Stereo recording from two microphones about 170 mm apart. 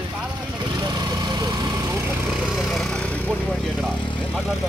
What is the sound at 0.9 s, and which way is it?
Vehicle, 25° right (ahead or behind).